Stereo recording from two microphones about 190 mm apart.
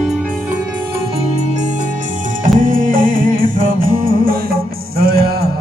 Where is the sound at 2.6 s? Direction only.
45° right (ahead or behind).